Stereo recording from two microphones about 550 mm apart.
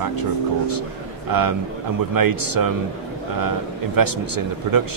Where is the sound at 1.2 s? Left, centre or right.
Right.